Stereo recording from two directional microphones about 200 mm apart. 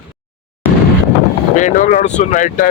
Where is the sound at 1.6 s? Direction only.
40° left (ahead or behind).